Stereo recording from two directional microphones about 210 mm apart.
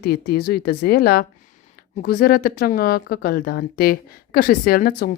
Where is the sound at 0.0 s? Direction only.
45° left (ahead or behind).